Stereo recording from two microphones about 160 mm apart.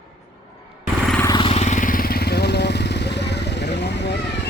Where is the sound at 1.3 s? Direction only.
35° left (ahead or behind).